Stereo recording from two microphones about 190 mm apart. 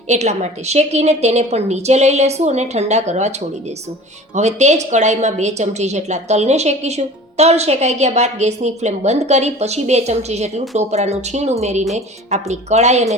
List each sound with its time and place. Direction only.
0.1 s a woman's voice: 35° right (ahead or behind)
4.4 s a woman's voice: 35° right (ahead or behind)